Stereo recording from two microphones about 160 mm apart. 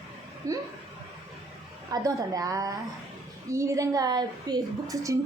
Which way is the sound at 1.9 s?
20° right (ahead or behind).